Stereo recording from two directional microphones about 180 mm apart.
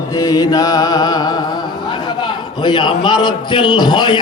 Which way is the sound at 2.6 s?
25° left (ahead or behind).